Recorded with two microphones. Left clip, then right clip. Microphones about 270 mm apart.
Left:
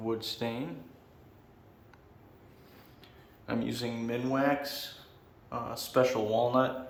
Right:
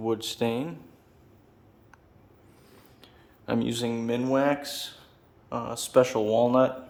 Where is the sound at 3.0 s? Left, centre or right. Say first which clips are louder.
Right 5 dB; right.